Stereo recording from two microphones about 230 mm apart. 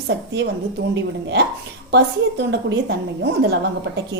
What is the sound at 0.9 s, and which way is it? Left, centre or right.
A woman's voice, right.